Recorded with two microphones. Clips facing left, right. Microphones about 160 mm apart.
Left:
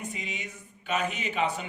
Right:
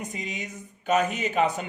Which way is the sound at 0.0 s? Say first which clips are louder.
Right 3 dB; 40° right (ahead or behind).